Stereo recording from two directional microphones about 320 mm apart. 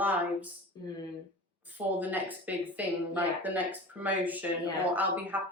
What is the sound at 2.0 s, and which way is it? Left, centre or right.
Speech, centre.